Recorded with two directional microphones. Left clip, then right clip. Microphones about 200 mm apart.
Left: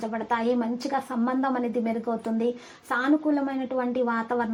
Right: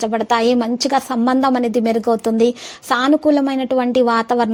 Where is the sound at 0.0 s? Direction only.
40° right (ahead or behind).